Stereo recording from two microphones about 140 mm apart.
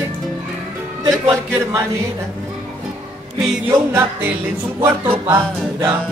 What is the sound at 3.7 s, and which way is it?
Speech, 15° right (ahead or behind).